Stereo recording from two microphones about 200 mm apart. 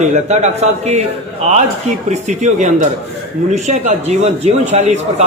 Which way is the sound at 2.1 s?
35° right (ahead or behind).